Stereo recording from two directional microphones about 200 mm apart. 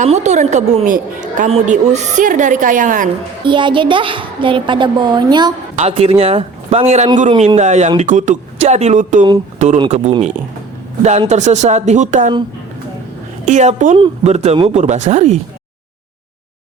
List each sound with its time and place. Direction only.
0.0 s a woman's voice: 35° right (ahead or behind)
3.4 s a woman's voice: 25° right (ahead or behind)
5.7 s a woman's voice: 30° right (ahead or behind)
13.4 s a woman's voice: 35° right (ahead or behind)